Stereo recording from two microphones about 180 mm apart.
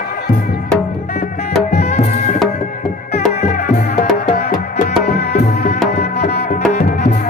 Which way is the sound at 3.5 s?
50° left (ahead or behind).